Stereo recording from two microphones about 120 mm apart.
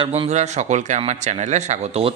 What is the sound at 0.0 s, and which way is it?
Speech, 50° right (ahead or behind).